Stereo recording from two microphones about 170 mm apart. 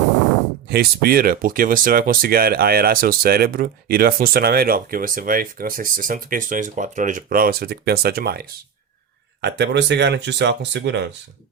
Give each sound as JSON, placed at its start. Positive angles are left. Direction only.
{"t": 0.7, "sound": "speech", "side_deg": -60}
{"t": 9.4, "sound": "speech", "side_deg": -90}